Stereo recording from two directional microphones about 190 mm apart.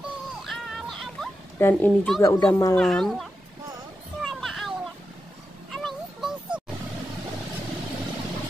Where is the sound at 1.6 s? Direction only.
10° left (ahead or behind).